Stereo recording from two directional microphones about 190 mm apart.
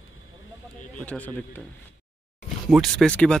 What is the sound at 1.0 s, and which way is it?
Speech, 5° left (ahead or behind).